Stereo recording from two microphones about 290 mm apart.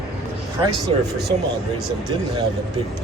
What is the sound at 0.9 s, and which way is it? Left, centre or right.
Speech, right.